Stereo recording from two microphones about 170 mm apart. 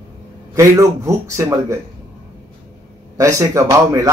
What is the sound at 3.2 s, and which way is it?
Speech, 15° right (ahead or behind).